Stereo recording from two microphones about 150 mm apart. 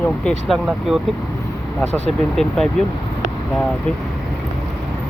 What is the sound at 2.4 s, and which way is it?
Speech, 5° left (ahead or behind).